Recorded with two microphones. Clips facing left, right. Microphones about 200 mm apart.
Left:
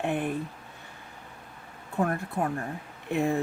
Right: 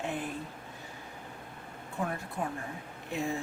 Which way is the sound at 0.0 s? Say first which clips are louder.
Left 6 dB; 60° left (ahead or behind).